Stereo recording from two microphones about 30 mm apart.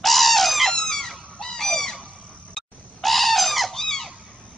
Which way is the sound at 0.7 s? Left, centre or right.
Centre.